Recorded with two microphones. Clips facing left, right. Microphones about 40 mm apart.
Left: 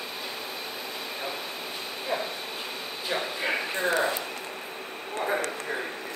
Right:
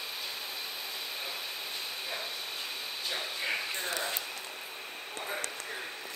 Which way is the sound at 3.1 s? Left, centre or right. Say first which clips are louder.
Left 7 dB; left.